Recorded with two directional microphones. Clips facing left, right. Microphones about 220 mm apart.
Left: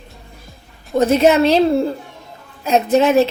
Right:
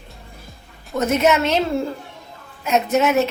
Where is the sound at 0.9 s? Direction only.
30° left (ahead or behind).